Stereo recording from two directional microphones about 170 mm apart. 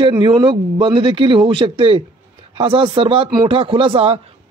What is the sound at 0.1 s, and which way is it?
A man's voice, 25° right (ahead or behind).